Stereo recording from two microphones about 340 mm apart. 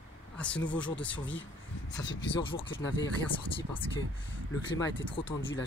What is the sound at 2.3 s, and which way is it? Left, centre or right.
Speech, centre.